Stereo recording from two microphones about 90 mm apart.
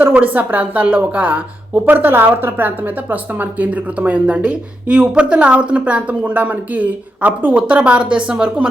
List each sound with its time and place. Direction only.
0.0 s a woman's voice: 20° right (ahead or behind)